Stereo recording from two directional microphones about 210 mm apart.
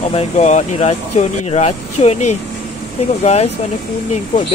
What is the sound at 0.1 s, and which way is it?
Speech, 30° left (ahead or behind).